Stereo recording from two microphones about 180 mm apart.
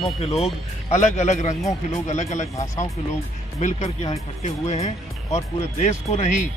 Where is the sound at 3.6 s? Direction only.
40° left (ahead or behind).